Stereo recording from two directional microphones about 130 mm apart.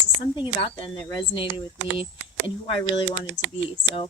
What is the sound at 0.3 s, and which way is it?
Speech, 35° left (ahead or behind).